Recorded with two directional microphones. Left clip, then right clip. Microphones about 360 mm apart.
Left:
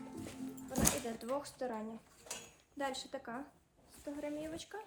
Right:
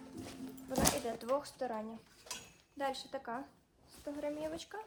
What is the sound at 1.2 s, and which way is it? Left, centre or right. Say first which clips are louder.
Speech: right 3 dB; centre.